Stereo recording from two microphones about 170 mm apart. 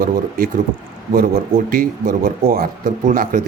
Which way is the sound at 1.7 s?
55° right (ahead or behind).